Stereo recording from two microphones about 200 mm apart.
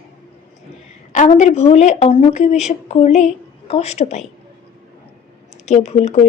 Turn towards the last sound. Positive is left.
turn(degrees=35)  # may be behind; listen again after turning